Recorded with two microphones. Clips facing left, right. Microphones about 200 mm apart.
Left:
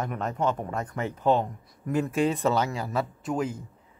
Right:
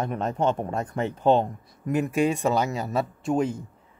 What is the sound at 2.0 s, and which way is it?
Speech, 15° right (ahead or behind).